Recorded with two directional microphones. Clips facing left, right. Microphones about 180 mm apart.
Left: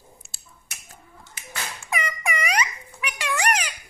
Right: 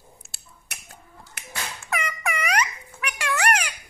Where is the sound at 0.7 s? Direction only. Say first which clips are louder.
Right 1 dB; 65° right (ahead or behind).